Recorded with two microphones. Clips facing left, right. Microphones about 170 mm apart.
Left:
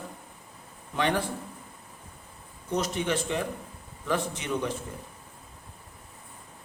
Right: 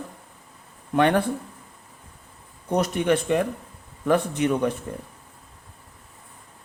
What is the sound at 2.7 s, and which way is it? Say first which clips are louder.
Speech: right 7 dB; 60° right (ahead or behind).